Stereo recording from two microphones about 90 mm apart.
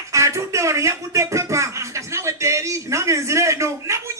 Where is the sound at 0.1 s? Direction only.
35° right (ahead or behind).